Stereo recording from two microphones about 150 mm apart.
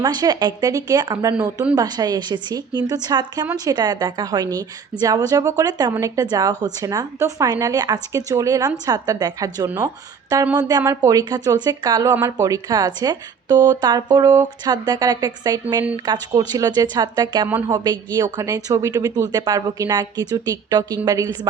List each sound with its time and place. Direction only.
0.0 s speech: 25° right (ahead or behind)